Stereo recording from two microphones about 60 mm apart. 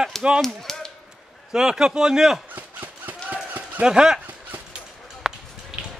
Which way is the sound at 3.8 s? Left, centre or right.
Centre.